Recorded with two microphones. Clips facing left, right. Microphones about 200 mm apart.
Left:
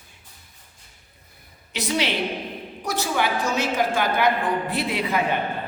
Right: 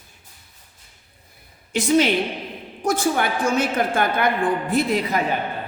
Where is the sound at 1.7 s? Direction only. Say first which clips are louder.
Right 7 dB; 50° right (ahead or behind).